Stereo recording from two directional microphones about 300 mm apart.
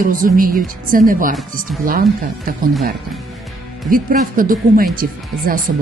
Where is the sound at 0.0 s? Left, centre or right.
Right.